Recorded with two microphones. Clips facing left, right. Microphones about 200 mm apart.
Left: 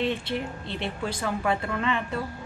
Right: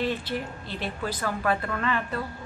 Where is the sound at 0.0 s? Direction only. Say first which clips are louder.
Left 1 dB; 25° left (ahead or behind).